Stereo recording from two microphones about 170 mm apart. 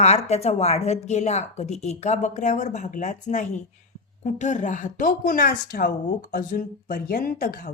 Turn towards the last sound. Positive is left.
turn(degrees=60)  # may be behind; listen again after turning